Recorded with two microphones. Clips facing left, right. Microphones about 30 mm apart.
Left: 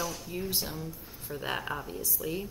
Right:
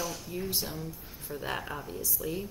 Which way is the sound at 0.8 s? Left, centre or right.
Centre.